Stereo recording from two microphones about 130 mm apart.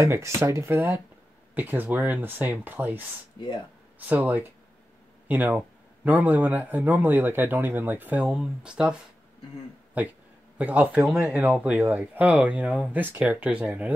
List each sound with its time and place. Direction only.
0.0 s speech: 20° right (ahead or behind)
3.4 s speech: 35° left (ahead or behind)
4.0 s speech: 15° right (ahead or behind)
9.9 s speech: 10° right (ahead or behind)